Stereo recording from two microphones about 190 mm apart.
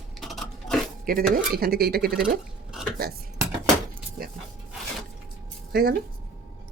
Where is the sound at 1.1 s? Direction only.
50° right (ahead or behind).